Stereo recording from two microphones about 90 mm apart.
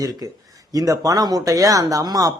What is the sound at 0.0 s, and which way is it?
A man's voice, 45° right (ahead or behind).